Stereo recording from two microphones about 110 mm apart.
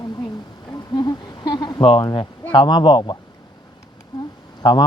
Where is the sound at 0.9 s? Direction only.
45° left (ahead or behind).